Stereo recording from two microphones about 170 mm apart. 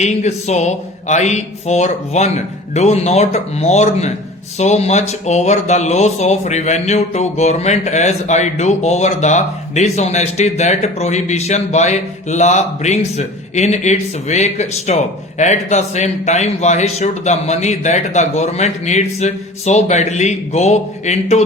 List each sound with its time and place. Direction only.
0.0 s speech: 40° left (ahead or behind)